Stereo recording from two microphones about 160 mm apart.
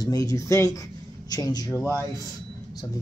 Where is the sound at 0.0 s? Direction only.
20° left (ahead or behind).